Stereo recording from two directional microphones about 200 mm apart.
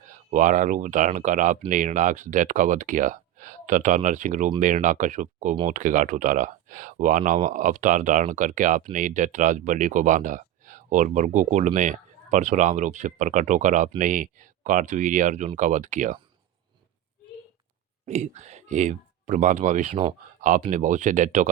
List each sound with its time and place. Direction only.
0.0 s speech: 40° right (ahead or behind)
18.0 s speech: 35° right (ahead or behind)